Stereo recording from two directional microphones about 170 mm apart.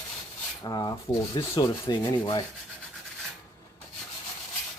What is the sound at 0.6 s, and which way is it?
Speech, 20° left (ahead or behind).